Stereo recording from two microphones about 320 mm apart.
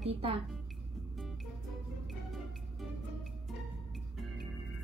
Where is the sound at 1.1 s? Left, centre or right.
Centre.